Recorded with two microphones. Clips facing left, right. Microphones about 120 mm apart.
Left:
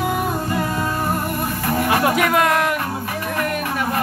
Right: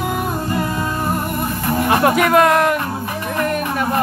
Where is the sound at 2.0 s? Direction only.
50° right (ahead or behind).